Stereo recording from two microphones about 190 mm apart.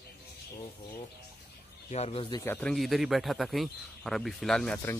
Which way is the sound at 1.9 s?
30° left (ahead or behind).